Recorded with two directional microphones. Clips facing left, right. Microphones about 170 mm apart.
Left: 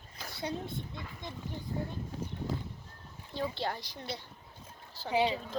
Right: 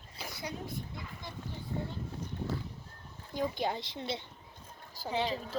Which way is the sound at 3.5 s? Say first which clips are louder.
Right 2 dB; 20° right (ahead or behind).